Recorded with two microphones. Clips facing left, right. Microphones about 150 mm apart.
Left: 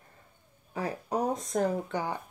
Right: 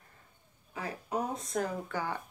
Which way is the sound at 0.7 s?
35° left (ahead or behind).